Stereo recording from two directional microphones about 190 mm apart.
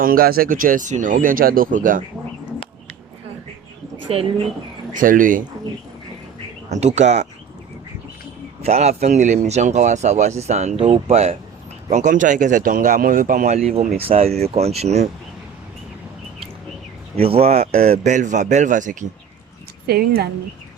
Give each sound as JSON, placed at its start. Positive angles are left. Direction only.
{"t": 0.0, "sound": "speech", "side_deg": -50}
{"t": 4.1, "sound": "a man's voice", "side_deg": -30}
{"t": 4.9, "sound": "speech", "side_deg": -45}
{"t": 6.7, "sound": "a man's voice", "side_deg": -35}
{"t": 8.6, "sound": "a man's voice", "side_deg": -35}
{"t": 13.7, "sound": "a man's voice", "side_deg": -35}
{"t": 17.2, "sound": "a man's voice", "side_deg": -30}
{"t": 19.9, "sound": "a woman's voice", "side_deg": -60}